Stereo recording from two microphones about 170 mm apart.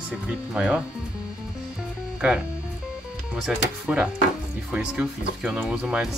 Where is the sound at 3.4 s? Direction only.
5° right (ahead or behind).